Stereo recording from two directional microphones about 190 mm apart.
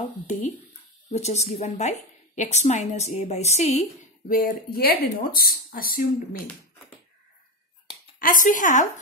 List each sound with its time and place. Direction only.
1.1 s a woman's voice: 35° left (ahead or behind)
4.3 s speech: 50° left (ahead or behind)
8.2 s speech: 45° left (ahead or behind)